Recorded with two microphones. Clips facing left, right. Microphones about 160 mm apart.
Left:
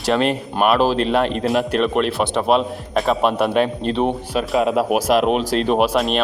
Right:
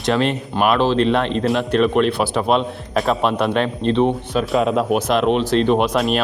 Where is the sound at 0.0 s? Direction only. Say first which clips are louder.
Even; 5° left (ahead or behind).